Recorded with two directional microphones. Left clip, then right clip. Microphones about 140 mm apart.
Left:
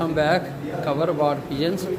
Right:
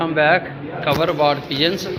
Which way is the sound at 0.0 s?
25° left (ahead or behind).